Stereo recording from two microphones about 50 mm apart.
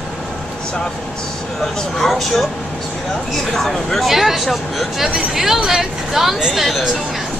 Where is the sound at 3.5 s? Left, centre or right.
Centre.